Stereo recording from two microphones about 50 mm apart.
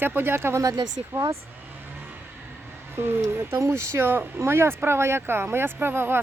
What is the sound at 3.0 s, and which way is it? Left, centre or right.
Speech, right.